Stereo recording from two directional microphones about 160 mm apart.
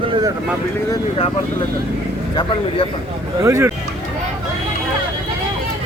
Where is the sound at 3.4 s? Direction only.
15° right (ahead or behind).